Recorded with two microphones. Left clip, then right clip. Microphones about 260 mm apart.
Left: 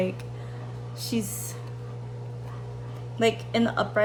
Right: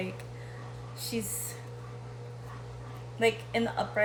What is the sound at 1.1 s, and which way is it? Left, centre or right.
Speech, centre.